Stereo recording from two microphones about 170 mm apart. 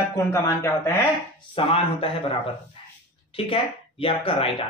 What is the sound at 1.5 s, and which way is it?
Speech, 35° left (ahead or behind).